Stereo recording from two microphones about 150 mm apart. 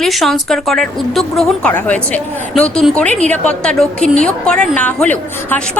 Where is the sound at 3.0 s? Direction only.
50° right (ahead or behind).